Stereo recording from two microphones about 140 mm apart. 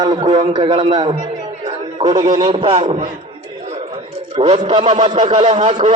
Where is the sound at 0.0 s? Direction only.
30° right (ahead or behind).